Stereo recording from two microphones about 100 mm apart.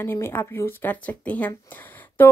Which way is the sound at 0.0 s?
25° left (ahead or behind).